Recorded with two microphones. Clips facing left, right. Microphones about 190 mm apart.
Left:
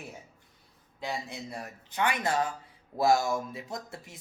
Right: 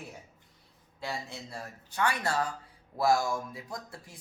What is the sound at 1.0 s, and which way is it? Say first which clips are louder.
Speech: left 2 dB; 20° left (ahead or behind).